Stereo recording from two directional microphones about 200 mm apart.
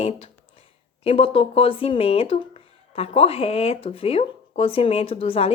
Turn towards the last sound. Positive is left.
turn(degrees=30)  # may be behind; listen again after turning